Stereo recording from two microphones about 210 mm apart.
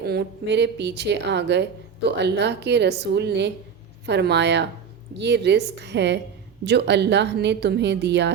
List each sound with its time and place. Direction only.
0.0 s a woman's voice: 50° right (ahead or behind)